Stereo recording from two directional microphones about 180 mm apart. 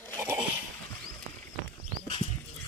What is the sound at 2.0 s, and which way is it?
Dog, 30° left (ahead or behind).